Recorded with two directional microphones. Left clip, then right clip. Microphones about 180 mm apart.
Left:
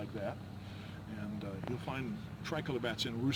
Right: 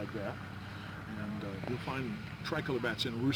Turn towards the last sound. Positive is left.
turn(degrees=25)  # may be behind; listen again after turning